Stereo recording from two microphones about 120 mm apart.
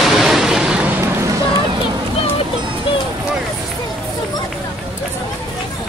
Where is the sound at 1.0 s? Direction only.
25° right (ahead or behind).